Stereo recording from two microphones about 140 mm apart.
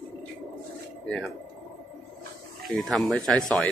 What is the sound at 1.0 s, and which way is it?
Speech, 5° left (ahead or behind).